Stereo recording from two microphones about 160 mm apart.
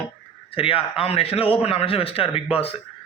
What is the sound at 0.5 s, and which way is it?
A man's voice, 35° left (ahead or behind).